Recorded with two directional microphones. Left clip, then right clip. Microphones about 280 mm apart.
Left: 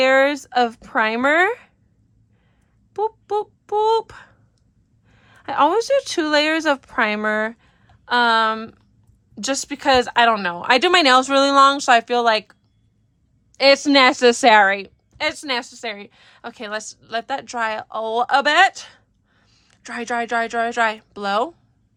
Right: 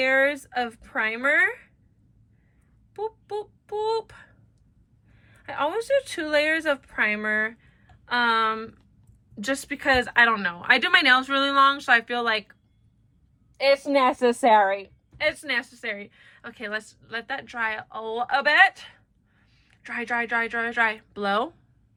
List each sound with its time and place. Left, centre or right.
0.0 s a woman's voice: centre
2.9 s a woman's voice: left
15.2 s a woman's voice: centre